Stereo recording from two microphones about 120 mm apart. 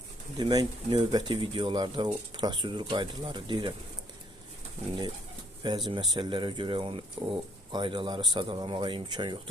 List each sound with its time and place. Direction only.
0.3 s speech: 35° right (ahead or behind)
5.9 s speech: 40° right (ahead or behind)